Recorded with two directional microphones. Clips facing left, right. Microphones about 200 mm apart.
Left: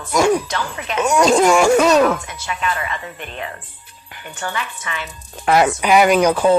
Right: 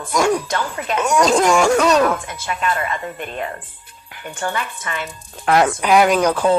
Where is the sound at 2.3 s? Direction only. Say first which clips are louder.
Right 1 dB; 50° right (ahead or behind).